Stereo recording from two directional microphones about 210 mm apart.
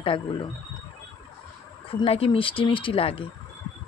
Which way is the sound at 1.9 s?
25° left (ahead or behind).